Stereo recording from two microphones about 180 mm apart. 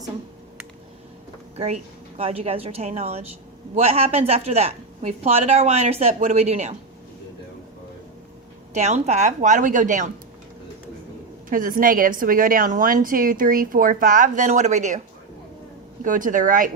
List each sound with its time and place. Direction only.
1.5 s a woman's voice: 35° right (ahead or behind)
8.7 s a woman's voice: 40° right (ahead or behind)
11.4 s a woman's voice: 50° right (ahead or behind)
16.0 s a woman's voice: 45° right (ahead or behind)